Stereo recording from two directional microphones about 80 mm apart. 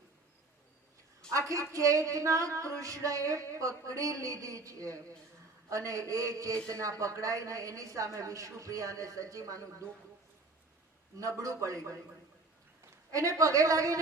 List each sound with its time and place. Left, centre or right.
1.3 s a woman's voice: right
11.2 s a woman's voice: right